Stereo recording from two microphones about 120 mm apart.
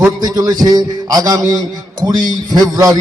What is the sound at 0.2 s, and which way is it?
A man's voice, 30° right (ahead or behind).